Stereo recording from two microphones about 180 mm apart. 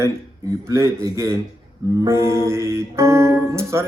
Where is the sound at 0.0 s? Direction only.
15° right (ahead or behind).